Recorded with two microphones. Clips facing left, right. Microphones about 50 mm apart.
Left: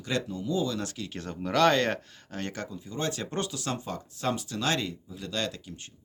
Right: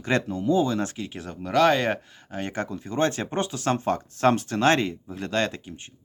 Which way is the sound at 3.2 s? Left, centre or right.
Right.